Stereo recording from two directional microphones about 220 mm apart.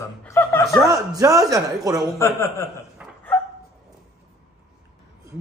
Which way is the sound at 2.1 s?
15° left (ahead or behind).